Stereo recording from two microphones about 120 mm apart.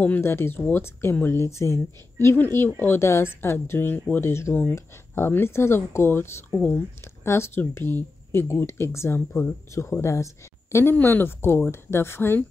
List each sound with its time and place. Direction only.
0.0 s speech: 15° left (ahead or behind)